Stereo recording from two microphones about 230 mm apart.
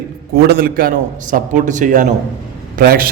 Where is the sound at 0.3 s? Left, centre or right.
Right.